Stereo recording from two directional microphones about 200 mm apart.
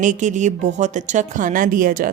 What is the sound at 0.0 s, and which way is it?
A woman's voice, 40° right (ahead or behind).